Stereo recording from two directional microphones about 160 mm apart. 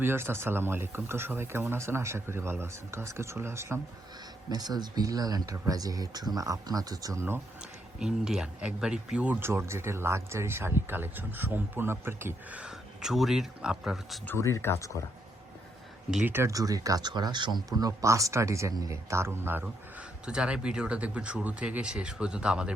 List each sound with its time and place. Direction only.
0.0 s speech: 15° right (ahead or behind)
7.6 s speech: 5° right (ahead or behind)
14.3 s speech: 15° left (ahead or behind)
16.1 s speech: 15° right (ahead or behind)